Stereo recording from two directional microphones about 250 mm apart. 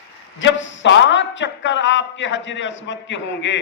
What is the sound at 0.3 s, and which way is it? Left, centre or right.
A man's voice, left.